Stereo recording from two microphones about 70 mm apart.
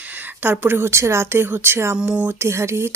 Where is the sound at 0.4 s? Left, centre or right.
Right.